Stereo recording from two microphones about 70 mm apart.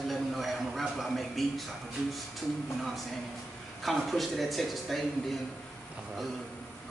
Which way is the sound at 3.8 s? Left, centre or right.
Centre.